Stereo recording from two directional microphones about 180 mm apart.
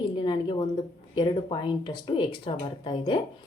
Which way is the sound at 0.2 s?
25° left (ahead or behind).